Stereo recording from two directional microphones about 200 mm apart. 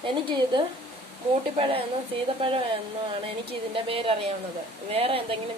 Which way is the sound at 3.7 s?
25° right (ahead or behind).